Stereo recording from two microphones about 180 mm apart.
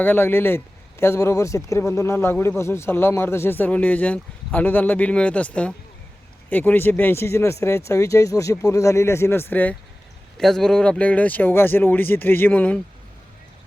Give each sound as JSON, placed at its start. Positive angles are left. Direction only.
{"t": 0.0, "sound": "speech", "side_deg": 10}